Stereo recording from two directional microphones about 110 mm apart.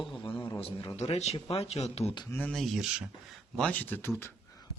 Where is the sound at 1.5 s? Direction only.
70° left (ahead or behind).